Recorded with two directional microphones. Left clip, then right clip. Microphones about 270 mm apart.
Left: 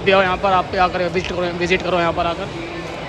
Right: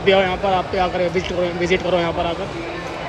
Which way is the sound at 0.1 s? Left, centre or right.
Centre.